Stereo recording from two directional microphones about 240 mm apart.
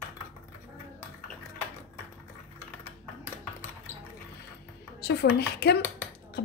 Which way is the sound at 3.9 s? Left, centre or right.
Centre.